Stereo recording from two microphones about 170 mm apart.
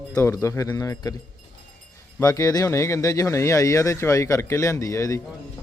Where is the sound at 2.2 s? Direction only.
20° left (ahead or behind).